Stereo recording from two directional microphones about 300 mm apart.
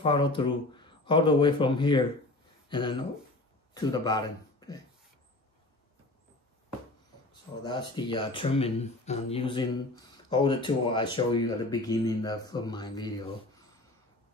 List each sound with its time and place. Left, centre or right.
0.0 s speech: centre
7.6 s speech: centre